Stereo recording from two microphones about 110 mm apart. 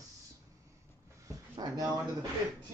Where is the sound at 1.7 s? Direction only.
35° right (ahead or behind).